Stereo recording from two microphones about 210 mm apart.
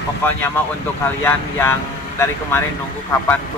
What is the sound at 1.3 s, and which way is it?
Speech, 10° left (ahead or behind).